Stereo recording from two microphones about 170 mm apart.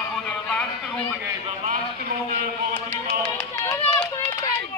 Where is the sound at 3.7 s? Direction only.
20° left (ahead or behind).